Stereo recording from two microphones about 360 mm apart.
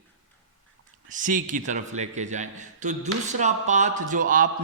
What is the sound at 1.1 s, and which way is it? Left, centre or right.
A man's voice, right.